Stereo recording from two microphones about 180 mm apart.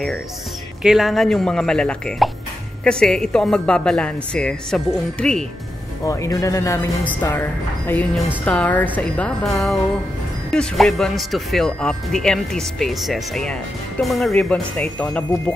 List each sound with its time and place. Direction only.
0.8 s speech: centre (ahead or behind)
6.0 s a woman's voice: 20° left (ahead or behind)
10.5 s speech: 5° left (ahead or behind)